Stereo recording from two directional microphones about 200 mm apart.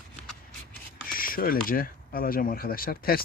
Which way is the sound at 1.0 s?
45° left (ahead or behind).